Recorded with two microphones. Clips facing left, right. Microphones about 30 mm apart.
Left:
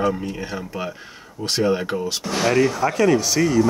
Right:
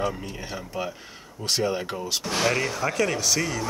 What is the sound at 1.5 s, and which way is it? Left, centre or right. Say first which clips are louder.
Speech: left 5 dB; centre.